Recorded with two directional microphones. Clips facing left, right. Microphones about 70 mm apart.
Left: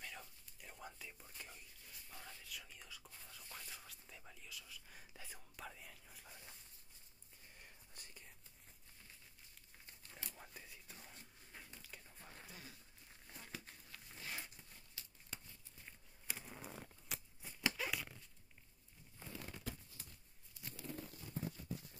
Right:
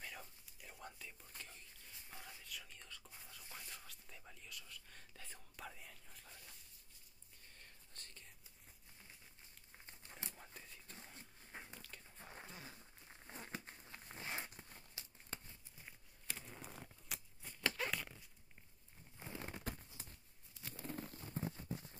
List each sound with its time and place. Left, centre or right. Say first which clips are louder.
0.0 s whispering: right 1 dB; centre
1.9 s whispering: right 1 dB; right
2.4 s whispering: even; centre
7.5 s whispering: left 1 dB; centre
10.3 s whispering: even; centre
11.1 s dog: right 3 dB; right
12.2 s a sound: right 4 dB; right
16.3 s a sound: left 1 dB; centre
19.1 s crumpling: right 3 dB; right
20.7 s a sound: right 2 dB; right